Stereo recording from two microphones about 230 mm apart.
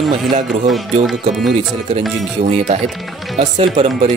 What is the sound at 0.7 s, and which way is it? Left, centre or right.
Speech, centre.